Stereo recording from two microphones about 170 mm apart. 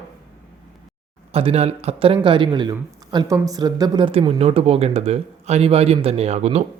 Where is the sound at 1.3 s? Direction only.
35° right (ahead or behind).